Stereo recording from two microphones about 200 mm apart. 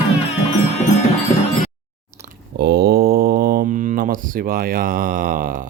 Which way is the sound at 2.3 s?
55° right (ahead or behind).